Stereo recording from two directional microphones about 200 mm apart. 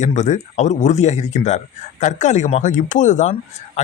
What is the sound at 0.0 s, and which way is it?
Speech, 35° left (ahead or behind).